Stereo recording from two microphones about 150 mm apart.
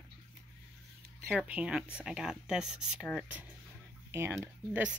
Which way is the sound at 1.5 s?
5° right (ahead or behind).